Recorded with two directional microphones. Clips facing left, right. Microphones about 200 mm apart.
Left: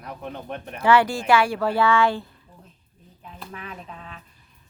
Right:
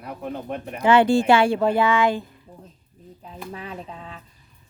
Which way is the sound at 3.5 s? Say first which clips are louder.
Right 3 dB; 30° right (ahead or behind).